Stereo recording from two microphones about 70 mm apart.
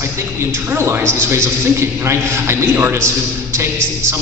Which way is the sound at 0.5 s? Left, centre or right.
Right.